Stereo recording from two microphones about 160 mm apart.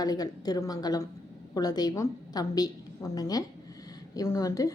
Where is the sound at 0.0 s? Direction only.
25° left (ahead or behind).